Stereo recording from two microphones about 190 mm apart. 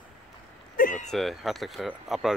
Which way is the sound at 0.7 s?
45° left (ahead or behind).